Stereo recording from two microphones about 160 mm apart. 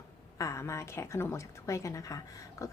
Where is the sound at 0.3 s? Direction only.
20° left (ahead or behind).